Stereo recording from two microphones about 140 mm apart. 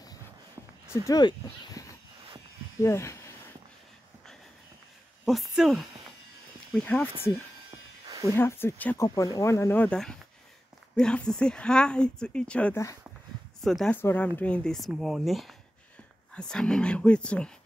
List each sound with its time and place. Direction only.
1.0 s speech: 25° left (ahead or behind)
2.8 s speech: 20° left (ahead or behind)
5.2 s speech: centre (ahead or behind)
6.7 s speech: 10° left (ahead or behind)
8.3 s speech: 15° left (ahead or behind)
9.0 s speech: 25° left (ahead or behind); by 13.9 s centre (ahead or behind)
13.9 s speech: 10° left (ahead or behind)